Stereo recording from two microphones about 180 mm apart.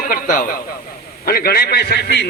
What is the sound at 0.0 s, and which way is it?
A man's voice, 50° left (ahead or behind).